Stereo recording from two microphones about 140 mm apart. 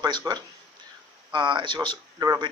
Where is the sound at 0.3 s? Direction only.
30° right (ahead or behind).